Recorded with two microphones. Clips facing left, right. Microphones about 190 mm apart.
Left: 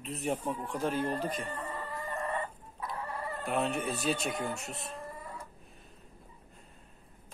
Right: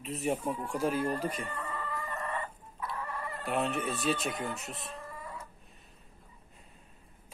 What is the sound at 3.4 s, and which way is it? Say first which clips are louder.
Speech: even; centre (ahead or behind).